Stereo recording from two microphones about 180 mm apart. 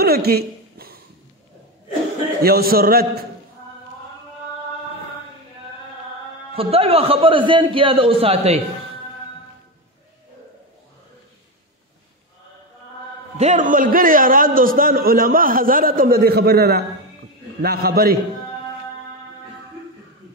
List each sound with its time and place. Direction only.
0.0 s a sound: 60° right (ahead or behind)
2.4 s a man's voice: 55° right (ahead or behind)
6.5 s a man's voice: 30° right (ahead or behind)
13.4 s a man's voice: 40° right (ahead or behind); by 18.1 s 60° right (ahead or behind)